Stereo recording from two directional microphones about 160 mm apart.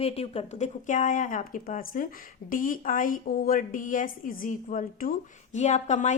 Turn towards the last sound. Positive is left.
turn(degrees=45)  # may be behind; listen again after turning